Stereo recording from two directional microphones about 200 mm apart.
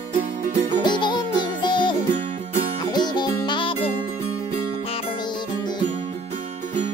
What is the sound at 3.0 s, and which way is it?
Music, 20° left (ahead or behind).